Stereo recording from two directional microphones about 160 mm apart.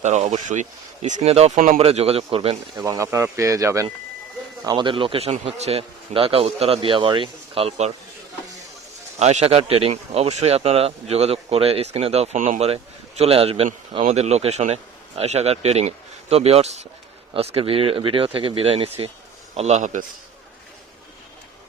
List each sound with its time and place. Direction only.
0.0 s speech: 45° right (ahead or behind)
1.8 s speech: 40° right (ahead or behind)
2.8 s speech: 20° right (ahead or behind); by 7.9 s 40° right (ahead or behind)
9.1 s speech: 45° right (ahead or behind)